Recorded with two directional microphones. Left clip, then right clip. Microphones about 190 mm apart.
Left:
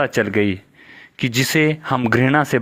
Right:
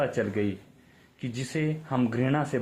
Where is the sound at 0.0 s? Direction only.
40° left (ahead or behind).